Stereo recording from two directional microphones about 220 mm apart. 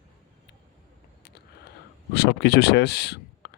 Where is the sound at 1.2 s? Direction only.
50° left (ahead or behind).